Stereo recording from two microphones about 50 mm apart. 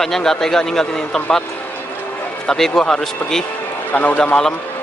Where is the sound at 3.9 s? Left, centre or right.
Left.